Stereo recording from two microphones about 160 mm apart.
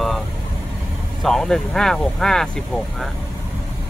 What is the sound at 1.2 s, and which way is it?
Speech, centre (ahead or behind).